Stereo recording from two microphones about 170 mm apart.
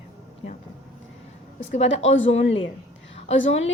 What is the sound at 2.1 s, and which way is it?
Speech, 90° left.